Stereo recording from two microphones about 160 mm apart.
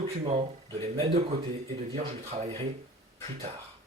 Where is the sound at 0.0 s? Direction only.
40° right (ahead or behind).